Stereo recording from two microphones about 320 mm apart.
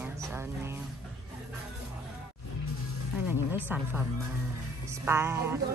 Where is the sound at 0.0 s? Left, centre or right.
Centre.